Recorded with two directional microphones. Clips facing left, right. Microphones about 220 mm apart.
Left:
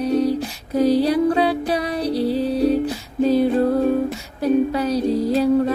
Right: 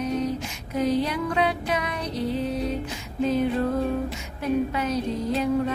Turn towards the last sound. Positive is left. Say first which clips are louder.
# left 7 dB
turn(degrees=40)  # may be behind; listen again after turning